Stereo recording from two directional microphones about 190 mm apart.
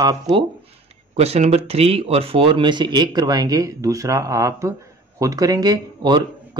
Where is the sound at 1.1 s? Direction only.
35° right (ahead or behind).